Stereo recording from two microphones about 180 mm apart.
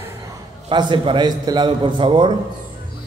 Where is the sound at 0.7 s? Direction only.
25° right (ahead or behind).